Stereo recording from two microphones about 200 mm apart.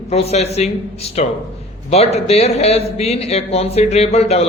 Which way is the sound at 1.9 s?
30° left (ahead or behind).